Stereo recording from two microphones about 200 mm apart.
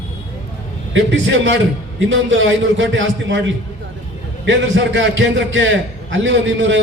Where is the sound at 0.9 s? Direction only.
65° right (ahead or behind).